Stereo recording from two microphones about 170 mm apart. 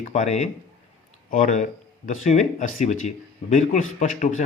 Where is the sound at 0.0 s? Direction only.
45° left (ahead or behind).